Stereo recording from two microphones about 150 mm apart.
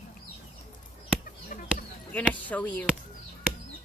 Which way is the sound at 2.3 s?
10° left (ahead or behind).